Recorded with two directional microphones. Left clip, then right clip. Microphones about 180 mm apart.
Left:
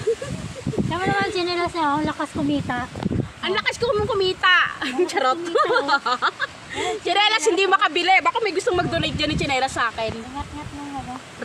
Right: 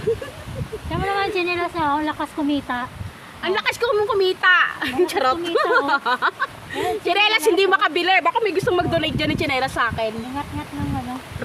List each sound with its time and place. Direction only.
0.9 s a sound: 30° left (ahead or behind)
1.3 s speech: 45° left (ahead or behind); by 2.8 s 25° left (ahead or behind)
3.4 s speech: 15° right (ahead or behind)